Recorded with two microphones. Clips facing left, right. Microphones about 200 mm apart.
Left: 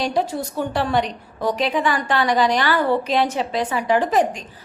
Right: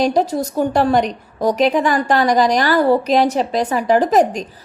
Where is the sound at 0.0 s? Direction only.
40° right (ahead or behind).